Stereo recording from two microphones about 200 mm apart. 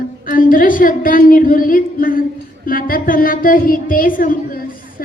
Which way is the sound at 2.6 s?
45° left (ahead or behind).